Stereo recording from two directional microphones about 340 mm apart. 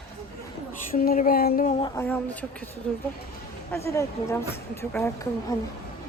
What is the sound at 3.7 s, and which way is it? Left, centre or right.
A woman's voice, centre.